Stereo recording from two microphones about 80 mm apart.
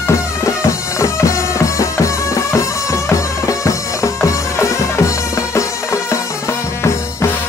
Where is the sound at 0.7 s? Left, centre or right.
Left.